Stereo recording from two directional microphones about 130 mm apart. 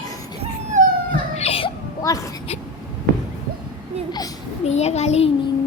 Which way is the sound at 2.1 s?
25° left (ahead or behind).